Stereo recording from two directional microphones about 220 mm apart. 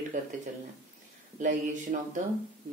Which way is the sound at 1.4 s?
35° right (ahead or behind).